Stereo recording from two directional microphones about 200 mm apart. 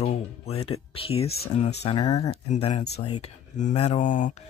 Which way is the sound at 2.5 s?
35° left (ahead or behind).